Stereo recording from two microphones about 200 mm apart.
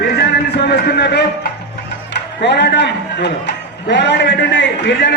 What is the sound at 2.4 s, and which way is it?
A man's voice, 60° left (ahead or behind).